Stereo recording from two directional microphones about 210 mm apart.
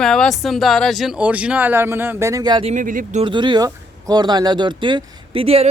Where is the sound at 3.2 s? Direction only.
20° right (ahead or behind).